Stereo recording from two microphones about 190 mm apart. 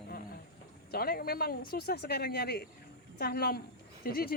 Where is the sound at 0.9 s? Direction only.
55° left (ahead or behind).